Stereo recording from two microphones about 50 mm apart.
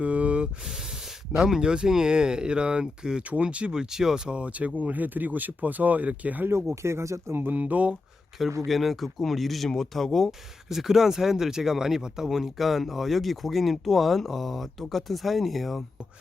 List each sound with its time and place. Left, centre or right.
0.0 s a sound: right
1.4 s speech: centre
3.2 s speech: right
6.7 s speech: right
7.3 s speech: right
7.6 s speech: right
8.6 s speech: centre
10.7 s speech: centre